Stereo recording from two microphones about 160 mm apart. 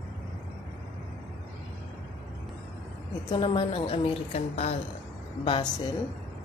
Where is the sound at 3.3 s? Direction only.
30° left (ahead or behind).